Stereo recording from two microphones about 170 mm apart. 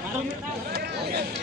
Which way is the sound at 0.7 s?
70° right (ahead or behind).